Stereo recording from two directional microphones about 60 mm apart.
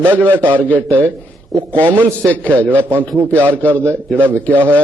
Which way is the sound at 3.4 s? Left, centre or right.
Right.